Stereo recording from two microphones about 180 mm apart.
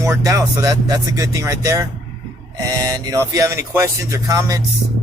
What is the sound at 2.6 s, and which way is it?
Music, 20° right (ahead or behind).